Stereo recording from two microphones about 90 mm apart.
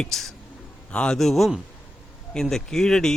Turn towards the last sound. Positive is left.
turn(degrees=5)  # may be behind; listen again after turning